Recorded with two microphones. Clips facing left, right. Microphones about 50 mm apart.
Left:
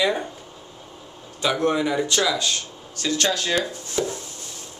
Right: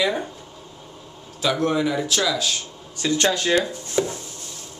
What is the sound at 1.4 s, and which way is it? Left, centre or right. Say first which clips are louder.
A man's voice: even; centre.